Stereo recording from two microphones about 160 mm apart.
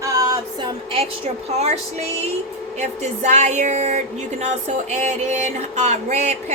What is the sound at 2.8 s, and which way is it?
Speech, 45° right (ahead or behind).